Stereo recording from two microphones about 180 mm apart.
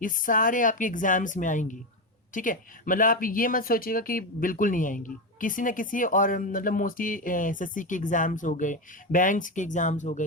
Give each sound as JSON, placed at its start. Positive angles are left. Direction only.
{"t": 0.0, "sound": "speech", "side_deg": 50}